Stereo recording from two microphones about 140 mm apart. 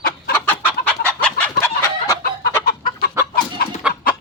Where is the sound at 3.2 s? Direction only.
20° right (ahead or behind).